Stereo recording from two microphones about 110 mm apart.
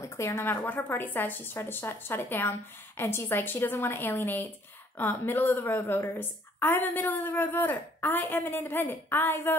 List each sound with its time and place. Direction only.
0.0 s a woman's voice: 25° left (ahead or behind)